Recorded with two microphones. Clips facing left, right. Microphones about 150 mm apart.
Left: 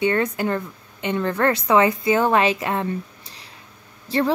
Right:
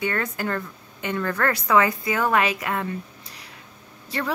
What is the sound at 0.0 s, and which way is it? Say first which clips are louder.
A woman's voice: left 6 dB; 20° left (ahead or behind).